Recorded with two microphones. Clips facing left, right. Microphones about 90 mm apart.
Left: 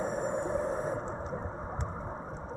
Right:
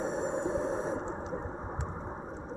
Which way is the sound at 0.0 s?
90° right.